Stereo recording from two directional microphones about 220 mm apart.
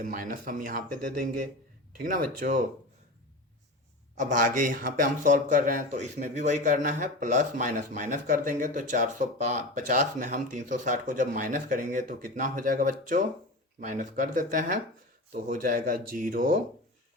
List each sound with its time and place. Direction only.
0.0 s speech: 40° right (ahead or behind)
4.2 s speech: 35° right (ahead or behind)